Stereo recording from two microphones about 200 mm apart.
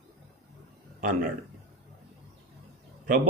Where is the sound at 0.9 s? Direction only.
45° right (ahead or behind).